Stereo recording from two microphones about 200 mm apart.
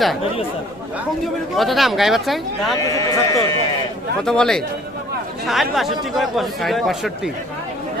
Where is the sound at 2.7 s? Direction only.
20° left (ahead or behind).